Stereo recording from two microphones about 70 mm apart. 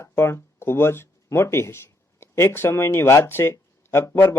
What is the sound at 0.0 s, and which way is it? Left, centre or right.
Speech, left.